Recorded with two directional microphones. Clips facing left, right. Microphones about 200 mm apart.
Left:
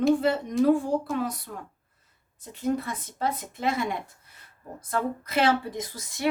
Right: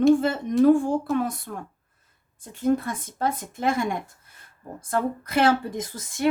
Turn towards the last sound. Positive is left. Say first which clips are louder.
# right 4 dB
turn(degrees=-50)  # may be behind; listen again after turning